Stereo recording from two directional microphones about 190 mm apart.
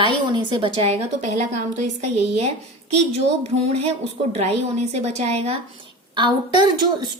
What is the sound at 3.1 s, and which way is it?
A woman's voice, 35° right (ahead or behind).